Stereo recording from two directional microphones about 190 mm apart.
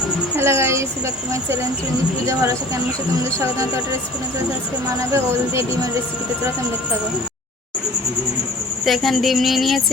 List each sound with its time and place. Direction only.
0.3 s speech: 15° right (ahead or behind)
2.2 s speech: 15° right (ahead or behind)
8.8 s speech: centre (ahead or behind)